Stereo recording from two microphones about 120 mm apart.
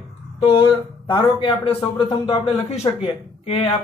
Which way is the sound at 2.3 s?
55° left (ahead or behind).